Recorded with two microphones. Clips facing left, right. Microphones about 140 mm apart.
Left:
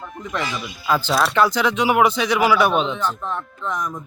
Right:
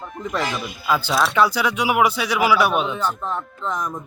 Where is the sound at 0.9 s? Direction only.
10° right (ahead or behind).